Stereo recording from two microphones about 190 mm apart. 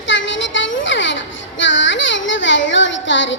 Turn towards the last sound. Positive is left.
turn(degrees=75)  # may be behind; listen again after turning